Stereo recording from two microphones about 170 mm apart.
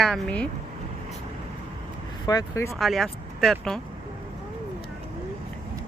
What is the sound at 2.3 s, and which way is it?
Speech, 20° left (ahead or behind).